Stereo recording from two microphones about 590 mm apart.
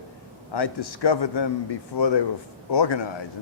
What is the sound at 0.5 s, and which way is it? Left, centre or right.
Speech, left.